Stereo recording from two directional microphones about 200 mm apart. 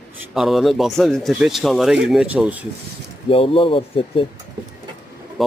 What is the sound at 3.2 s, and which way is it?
Speech, 30° left (ahead or behind).